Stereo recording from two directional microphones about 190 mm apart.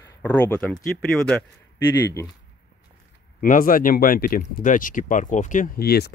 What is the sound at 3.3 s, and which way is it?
Speech, 45° left (ahead or behind).